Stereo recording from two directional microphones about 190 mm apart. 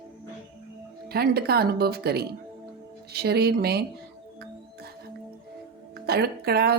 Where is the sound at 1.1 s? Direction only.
55° right (ahead or behind).